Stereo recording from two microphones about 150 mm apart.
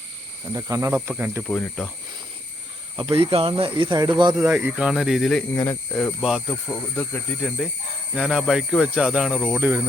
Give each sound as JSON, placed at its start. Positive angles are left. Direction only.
{"t": 0.5, "sound": "speech", "side_deg": -20}
{"t": 1.5, "sound": "speech", "side_deg": 10}
{"t": 2.9, "sound": "speech", "side_deg": -35}
{"t": 4.4, "sound": "speech", "side_deg": -10}
{"t": 5.5, "sound": "speech", "side_deg": 15}
{"t": 6.2, "sound": "speech", "side_deg": 0}
{"t": 6.9, "sound": "speech", "side_deg": 15}
{"t": 8.1, "sound": "speech", "side_deg": -5}